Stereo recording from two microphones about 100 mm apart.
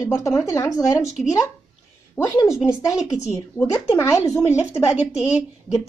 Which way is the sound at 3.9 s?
30° left (ahead or behind).